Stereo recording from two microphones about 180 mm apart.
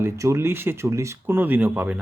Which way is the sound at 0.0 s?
15° right (ahead or behind).